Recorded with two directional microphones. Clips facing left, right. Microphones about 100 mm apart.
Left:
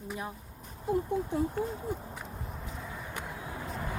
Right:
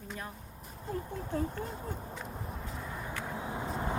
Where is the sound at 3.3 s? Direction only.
25° right (ahead or behind).